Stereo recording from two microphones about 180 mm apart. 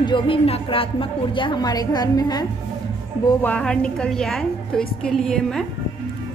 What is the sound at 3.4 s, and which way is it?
A woman's voice, 5° left (ahead or behind).